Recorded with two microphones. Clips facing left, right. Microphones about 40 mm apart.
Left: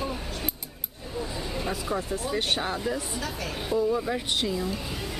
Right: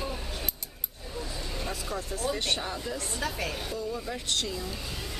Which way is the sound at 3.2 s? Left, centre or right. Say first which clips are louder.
Right 1 dB; centre.